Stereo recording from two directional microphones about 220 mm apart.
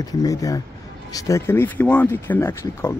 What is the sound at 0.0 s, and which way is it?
Speech, 15° left (ahead or behind).